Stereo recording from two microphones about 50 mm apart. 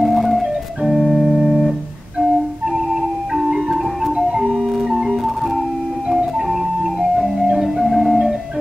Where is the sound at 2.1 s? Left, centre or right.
Centre.